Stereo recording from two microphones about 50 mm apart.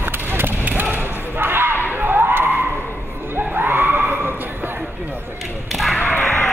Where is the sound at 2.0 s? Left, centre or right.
Right.